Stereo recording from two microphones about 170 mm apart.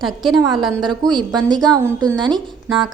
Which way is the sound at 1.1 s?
25° right (ahead or behind).